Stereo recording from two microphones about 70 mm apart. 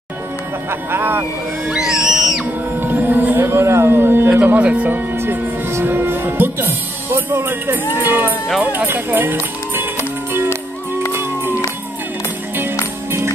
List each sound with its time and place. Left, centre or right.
0.7 s speech: right
1.7 s music: centre
2.8 s a sound: right
4.6 s speech: centre
5.1 s music: right
5.7 s speech: right
9.9 s music: right